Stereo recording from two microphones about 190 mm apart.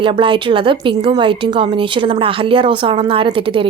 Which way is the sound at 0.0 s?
25° right (ahead or behind).